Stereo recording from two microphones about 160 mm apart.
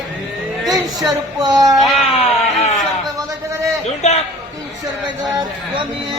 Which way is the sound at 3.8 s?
40° left (ahead or behind).